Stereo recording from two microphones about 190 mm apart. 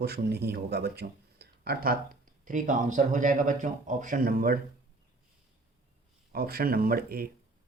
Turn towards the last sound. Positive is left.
turn(degrees=-50)  # may be behind; listen again after turning